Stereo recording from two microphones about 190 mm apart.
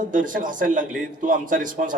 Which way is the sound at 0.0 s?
45° right (ahead or behind).